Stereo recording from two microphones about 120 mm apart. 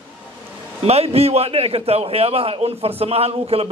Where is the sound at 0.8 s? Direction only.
60° right (ahead or behind).